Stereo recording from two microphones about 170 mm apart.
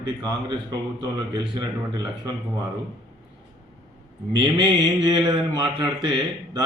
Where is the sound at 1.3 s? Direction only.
20° right (ahead or behind).